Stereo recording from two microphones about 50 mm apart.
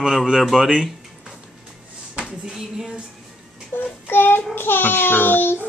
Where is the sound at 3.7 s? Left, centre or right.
Left.